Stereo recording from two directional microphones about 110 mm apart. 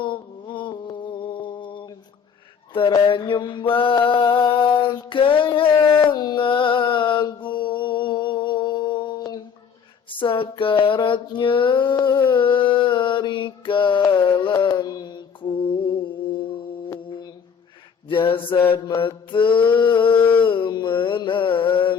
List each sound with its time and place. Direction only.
0.0 s music: 45° left (ahead or behind)
3.0 s mantra: 50° left (ahead or behind)
10.1 s a sound: 50° left (ahead or behind)
18.1 s mantra: 50° left (ahead or behind)